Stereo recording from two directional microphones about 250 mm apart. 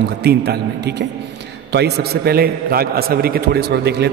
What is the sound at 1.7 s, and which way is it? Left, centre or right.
A man's voice, right.